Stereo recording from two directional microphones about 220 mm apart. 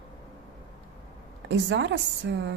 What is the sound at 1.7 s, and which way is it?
Speech, 55° right (ahead or behind).